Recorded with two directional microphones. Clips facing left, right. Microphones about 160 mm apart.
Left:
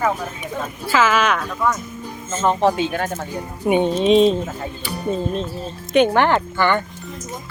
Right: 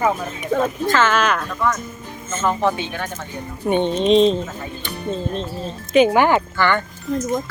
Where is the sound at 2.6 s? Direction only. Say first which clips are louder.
Left 3 dB; 40° left (ahead or behind).